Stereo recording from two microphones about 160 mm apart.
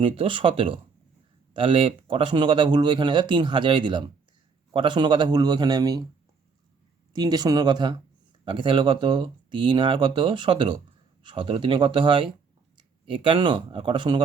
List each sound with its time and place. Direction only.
0.0 s speech: 35° right (ahead or behind)
7.1 s speech: 25° right (ahead or behind)